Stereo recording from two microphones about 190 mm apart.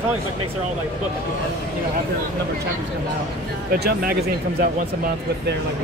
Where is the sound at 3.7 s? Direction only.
50° right (ahead or behind).